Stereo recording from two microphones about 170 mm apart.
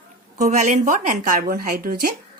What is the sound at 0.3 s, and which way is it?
Speech, 45° right (ahead or behind).